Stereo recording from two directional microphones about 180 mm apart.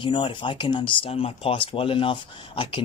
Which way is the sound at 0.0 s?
25° left (ahead or behind).